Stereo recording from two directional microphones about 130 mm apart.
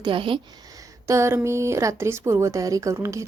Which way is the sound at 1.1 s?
20° right (ahead or behind).